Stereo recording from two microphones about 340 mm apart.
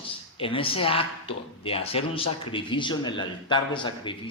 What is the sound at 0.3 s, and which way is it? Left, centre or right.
A man's voice, centre.